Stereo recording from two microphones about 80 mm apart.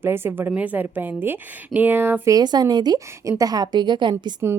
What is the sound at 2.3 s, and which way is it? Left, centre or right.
A woman's voice, right.